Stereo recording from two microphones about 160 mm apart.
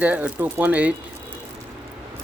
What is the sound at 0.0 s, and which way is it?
Speech, 10° right (ahead or behind).